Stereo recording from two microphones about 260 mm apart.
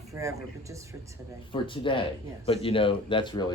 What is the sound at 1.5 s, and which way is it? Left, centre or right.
A man's voice, centre.